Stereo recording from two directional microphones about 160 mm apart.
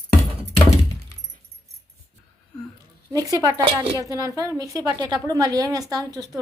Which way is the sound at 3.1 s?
20° right (ahead or behind).